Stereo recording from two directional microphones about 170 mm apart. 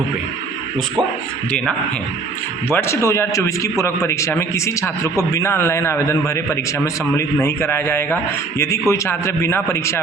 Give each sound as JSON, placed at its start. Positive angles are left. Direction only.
{"t": 2.6, "sound": "a man's voice", "side_deg": 15}